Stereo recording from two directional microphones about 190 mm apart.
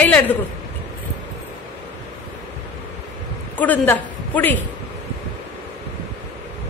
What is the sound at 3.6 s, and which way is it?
A woman's voice, 10° left (ahead or behind).